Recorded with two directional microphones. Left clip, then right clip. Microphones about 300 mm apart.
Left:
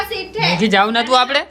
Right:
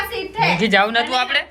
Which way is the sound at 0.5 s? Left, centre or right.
Centre.